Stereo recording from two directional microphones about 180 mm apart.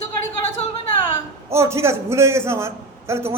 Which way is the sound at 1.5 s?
15° right (ahead or behind).